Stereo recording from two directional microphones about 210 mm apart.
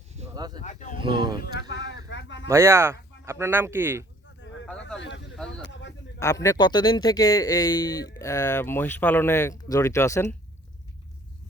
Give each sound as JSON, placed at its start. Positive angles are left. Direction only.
{"t": 0.3, "sound": "speech", "side_deg": -20}
{"t": 0.6, "sound": "speech", "side_deg": 35}
{"t": 0.9, "sound": "speech", "side_deg": -25}
{"t": 1.9, "sound": "a sound", "side_deg": 60}
{"t": 2.5, "sound": "speech", "side_deg": -15}
{"t": 4.9, "sound": "speech", "side_deg": 60}
{"t": 5.6, "sound": "a sound", "side_deg": 60}
{"t": 6.1, "sound": "speech", "side_deg": 15}